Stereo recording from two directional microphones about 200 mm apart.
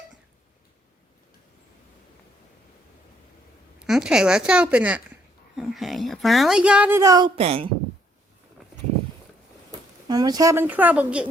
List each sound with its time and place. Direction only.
3.8 s speech: 5° right (ahead or behind)
7.3 s speech: 30° right (ahead or behind)
10.1 s speech: 20° right (ahead or behind)